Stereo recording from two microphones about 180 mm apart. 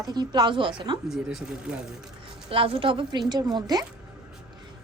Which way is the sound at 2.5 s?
30° right (ahead or behind).